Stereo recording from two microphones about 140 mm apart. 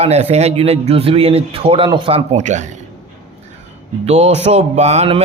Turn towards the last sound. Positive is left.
turn(degrees=-50)  # may be behind; listen again after turning